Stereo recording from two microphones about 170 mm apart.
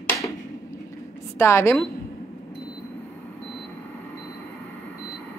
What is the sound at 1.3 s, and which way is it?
Speech, 15° left (ahead or behind).